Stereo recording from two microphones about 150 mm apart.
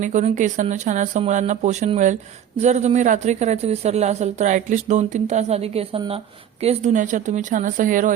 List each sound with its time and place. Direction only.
0.0 s speech: 55° right (ahead or behind)